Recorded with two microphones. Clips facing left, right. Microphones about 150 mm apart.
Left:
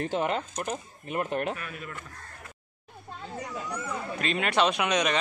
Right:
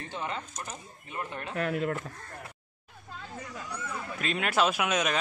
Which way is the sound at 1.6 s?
75° right (ahead or behind).